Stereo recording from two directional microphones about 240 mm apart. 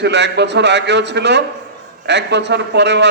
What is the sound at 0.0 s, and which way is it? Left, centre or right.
A man's voice, right.